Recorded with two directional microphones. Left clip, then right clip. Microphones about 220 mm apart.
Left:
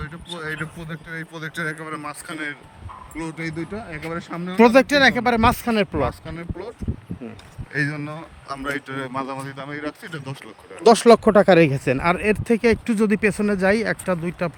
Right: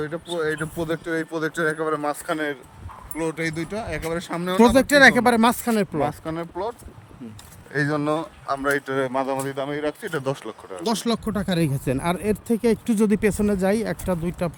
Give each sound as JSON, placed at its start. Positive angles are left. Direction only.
{"t": 0.3, "sound": "speech", "side_deg": -30}
{"t": 0.8, "sound": "a man's voice", "side_deg": -40}
{"t": 3.2, "sound": "speech", "side_deg": -5}
{"t": 6.0, "sound": "speech", "side_deg": -20}
{"t": 10.8, "sound": "speech", "side_deg": 15}